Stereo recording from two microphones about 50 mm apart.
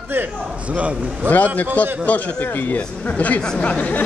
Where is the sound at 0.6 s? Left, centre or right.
Right.